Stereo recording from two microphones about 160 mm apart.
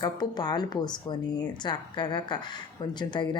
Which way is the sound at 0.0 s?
25° left (ahead or behind).